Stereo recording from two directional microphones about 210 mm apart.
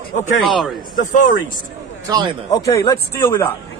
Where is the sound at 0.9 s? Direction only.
40° left (ahead or behind).